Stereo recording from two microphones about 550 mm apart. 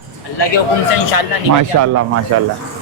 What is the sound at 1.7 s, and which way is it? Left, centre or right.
Speech, right.